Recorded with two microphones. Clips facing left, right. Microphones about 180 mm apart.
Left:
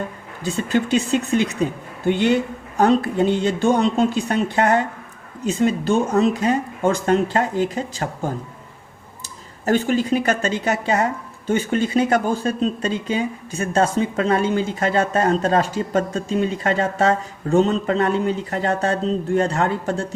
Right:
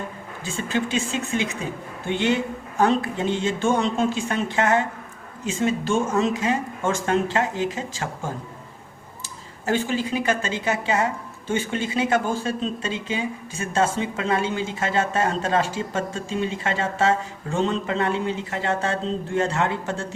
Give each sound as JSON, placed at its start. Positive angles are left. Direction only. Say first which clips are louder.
{"t": 0.4, "sound": "speech", "louder": "left 5 dB", "side_deg": 40}
{"t": 9.6, "sound": "speech", "louder": "left 5 dB", "side_deg": 40}